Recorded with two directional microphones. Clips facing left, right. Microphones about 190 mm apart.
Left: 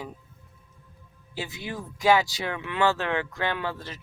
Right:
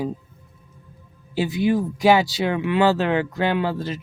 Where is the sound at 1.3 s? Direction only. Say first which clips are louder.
Right 14 dB; 30° right (ahead or behind).